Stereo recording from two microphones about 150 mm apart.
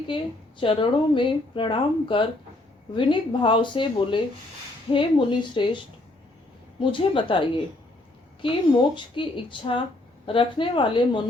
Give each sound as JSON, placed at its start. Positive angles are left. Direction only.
{"t": 0.6, "sound": "speech", "side_deg": 35}